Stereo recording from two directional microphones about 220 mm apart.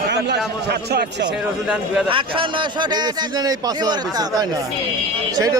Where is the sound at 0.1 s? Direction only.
50° right (ahead or behind).